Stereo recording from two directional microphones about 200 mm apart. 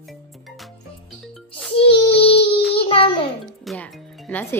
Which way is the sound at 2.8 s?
25° left (ahead or behind).